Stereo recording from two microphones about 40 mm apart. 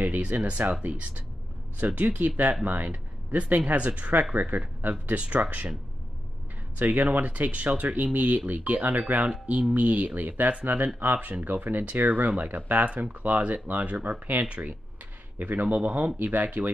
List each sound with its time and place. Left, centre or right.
0.2 s speech: right
1.8 s speech: right
7.0 s speech: right
12.8 s speech: right